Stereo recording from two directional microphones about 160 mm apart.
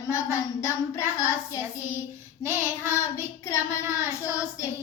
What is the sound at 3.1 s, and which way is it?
Child singing, 15° left (ahead or behind).